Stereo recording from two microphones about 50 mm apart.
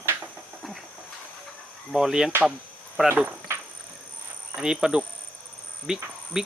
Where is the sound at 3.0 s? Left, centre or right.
Right.